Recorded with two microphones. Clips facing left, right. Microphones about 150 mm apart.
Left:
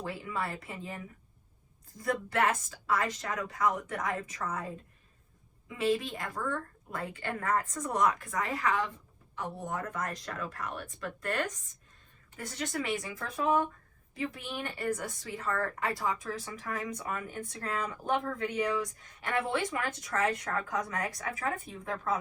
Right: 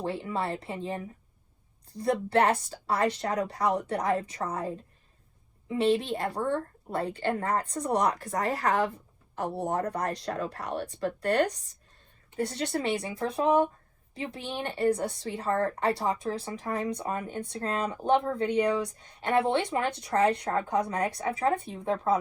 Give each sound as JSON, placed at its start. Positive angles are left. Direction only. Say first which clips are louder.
{"t": 0.0, "sound": "speech", "louder": "right 5 dB", "side_deg": -30}